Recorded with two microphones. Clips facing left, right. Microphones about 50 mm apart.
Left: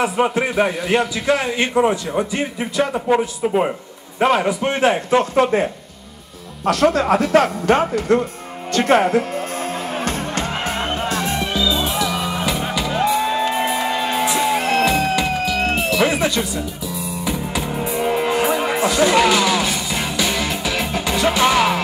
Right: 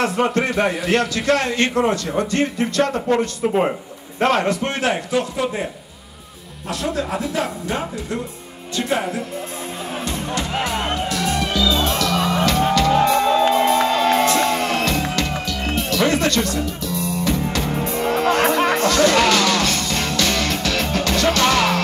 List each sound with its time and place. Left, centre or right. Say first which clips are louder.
0.0 s a man's voice: left 1 dB; centre
5.3 s speech: left 7 dB; left
6.6 s speech: left 8 dB; left
9.9 s music: right 1 dB; left
11.6 s music: right 1 dB; centre